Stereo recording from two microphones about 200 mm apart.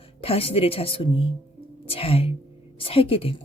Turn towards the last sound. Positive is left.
turn(degrees=30)  # may be behind; listen again after turning